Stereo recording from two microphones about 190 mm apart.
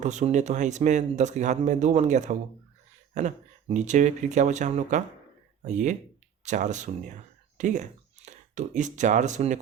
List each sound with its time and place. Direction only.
0.0 s speech: 40° right (ahead or behind)